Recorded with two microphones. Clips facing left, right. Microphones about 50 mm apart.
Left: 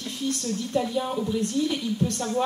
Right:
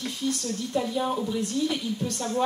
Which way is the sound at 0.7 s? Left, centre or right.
Centre.